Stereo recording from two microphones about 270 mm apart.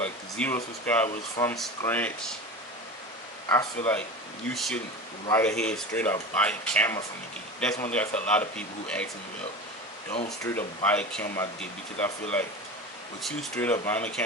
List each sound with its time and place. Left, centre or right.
0.0 s speech: centre
3.5 s speech: centre
10.1 s speech: left
10.8 s speech: centre